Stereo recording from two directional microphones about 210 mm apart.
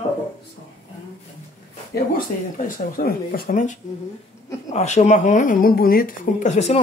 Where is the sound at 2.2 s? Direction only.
40° left (ahead or behind).